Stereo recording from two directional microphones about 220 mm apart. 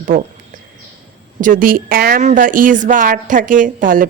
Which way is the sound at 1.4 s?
40° right (ahead or behind).